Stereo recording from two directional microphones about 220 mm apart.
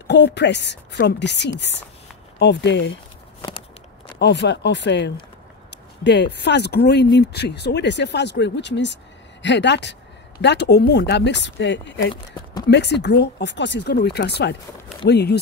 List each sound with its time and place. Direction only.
0.0 s speech: 50° left (ahead or behind)
4.2 s speech: 50° left (ahead or behind)